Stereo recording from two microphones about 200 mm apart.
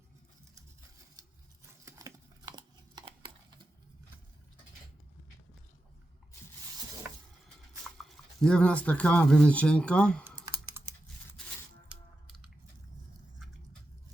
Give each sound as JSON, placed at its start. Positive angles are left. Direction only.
{"t": 1.8, "sound": "a sound", "side_deg": -15}
{"t": 7.9, "sound": "speech", "side_deg": 0}
{"t": 10.2, "sound": "typing", "side_deg": -15}